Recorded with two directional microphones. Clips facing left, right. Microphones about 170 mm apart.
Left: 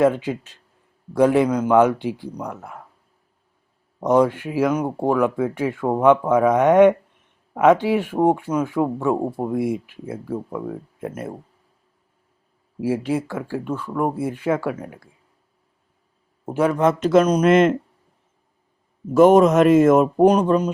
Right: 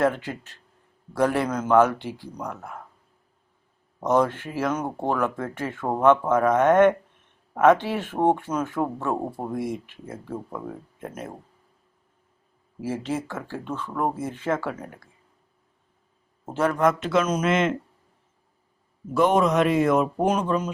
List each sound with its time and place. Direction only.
0.0 s speech: 15° left (ahead or behind)
4.0 s speech: 10° left (ahead or behind)
12.8 s speech: 10° left (ahead or behind)
16.5 s speech: 10° left (ahead or behind)
17.0 s speech: 40° left (ahead or behind)
19.1 s speech: 45° left (ahead or behind)